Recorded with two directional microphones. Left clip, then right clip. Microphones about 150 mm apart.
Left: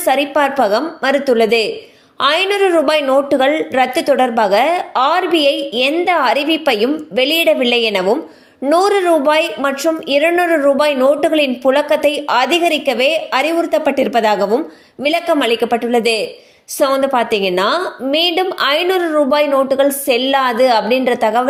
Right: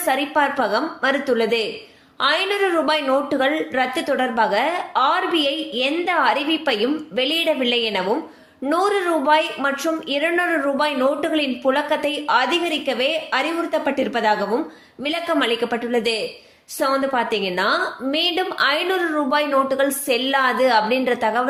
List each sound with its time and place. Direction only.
0.0 s a woman's voice: 40° left (ahead or behind)